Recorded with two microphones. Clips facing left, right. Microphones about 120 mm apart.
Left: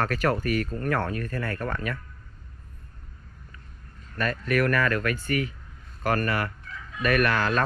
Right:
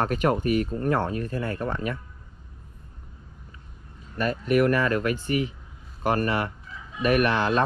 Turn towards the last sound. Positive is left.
turn(degrees=-25)  # may be behind; listen again after turning